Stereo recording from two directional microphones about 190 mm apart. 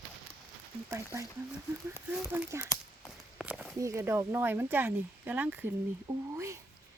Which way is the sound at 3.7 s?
15° right (ahead or behind).